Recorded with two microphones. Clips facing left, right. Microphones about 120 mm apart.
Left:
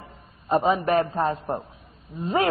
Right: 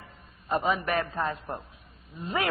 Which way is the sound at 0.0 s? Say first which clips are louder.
Left 5 dB; 30° left (ahead or behind).